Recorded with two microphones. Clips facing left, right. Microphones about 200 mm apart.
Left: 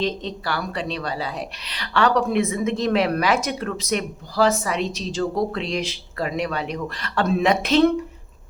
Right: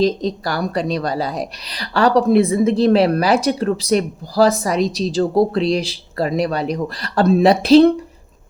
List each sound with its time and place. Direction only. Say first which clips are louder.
0.0 s a woman's voice: right 8 dB; 40° right (ahead or behind)